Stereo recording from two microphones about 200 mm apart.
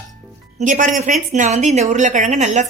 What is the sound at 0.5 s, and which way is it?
A woman's voice, 40° right (ahead or behind).